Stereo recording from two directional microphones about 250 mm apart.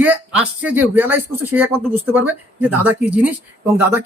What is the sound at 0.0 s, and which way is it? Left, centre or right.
Speech, centre.